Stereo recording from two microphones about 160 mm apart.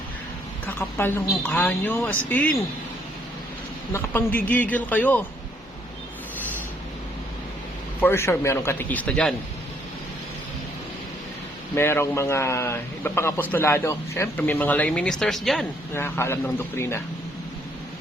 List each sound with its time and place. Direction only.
0.6 s a woman's voice: 15° left (ahead or behind)
3.9 s a man's voice: 15° left (ahead or behind)
8.0 s a man's voice: 15° left (ahead or behind)
11.7 s a man's voice: 15° left (ahead or behind)
16.0 s a man's voice: 15° left (ahead or behind)